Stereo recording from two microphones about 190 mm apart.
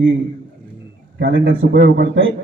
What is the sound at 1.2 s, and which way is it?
A man's voice, 70° right (ahead or behind).